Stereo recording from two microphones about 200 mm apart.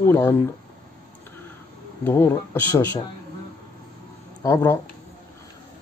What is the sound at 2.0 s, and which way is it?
Speech, 10° left (ahead or behind).